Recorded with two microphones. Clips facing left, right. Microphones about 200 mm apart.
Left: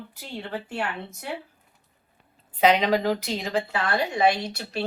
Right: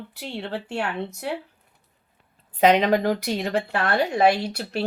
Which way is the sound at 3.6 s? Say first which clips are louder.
Right 3 dB; 65° right (ahead or behind).